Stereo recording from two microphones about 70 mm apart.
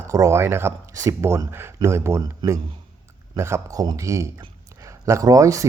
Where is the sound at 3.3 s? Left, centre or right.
Right.